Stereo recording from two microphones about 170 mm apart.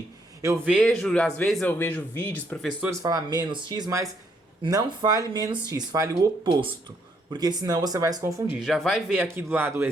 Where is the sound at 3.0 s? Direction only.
20° right (ahead or behind).